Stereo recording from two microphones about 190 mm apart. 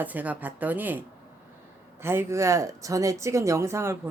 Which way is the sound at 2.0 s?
15° right (ahead or behind).